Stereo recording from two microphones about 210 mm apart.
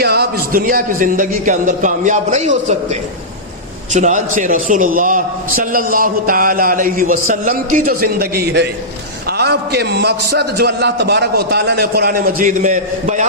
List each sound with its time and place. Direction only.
0.0 s a man's voice: 50° right (ahead or behind)